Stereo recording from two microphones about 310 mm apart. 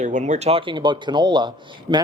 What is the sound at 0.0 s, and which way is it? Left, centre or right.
Speech, right.